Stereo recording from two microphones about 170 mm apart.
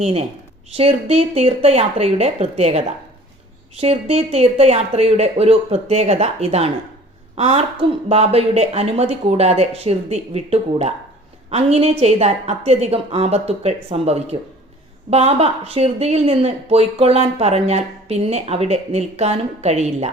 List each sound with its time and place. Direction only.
0.0 s speech: 35° right (ahead or behind)